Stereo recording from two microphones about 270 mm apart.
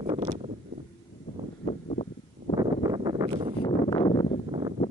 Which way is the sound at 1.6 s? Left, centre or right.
Left.